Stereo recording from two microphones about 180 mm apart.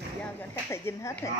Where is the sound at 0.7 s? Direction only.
15° left (ahead or behind).